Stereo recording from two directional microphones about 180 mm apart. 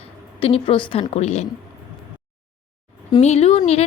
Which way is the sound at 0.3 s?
30° left (ahead or behind).